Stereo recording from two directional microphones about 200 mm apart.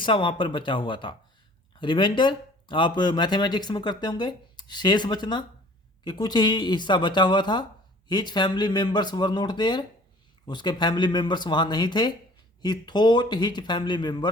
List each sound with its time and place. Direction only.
0.0 s speech: 25° left (ahead or behind)